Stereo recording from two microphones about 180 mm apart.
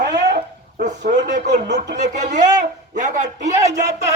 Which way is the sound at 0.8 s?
40° right (ahead or behind).